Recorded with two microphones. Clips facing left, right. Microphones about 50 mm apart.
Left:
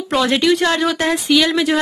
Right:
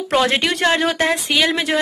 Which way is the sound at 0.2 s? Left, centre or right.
Right.